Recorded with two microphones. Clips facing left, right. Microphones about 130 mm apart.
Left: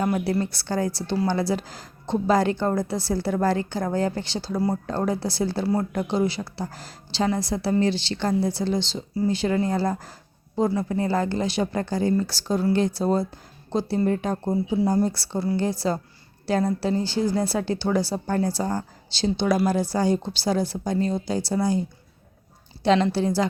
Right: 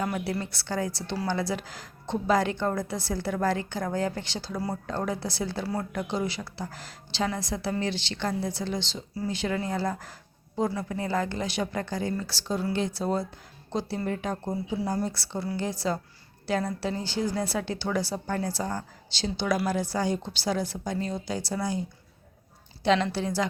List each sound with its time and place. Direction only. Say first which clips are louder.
0.0 s a woman's voice: left 6 dB; 35° left (ahead or behind)
22.8 s a woman's voice: left 4 dB; 35° left (ahead or behind)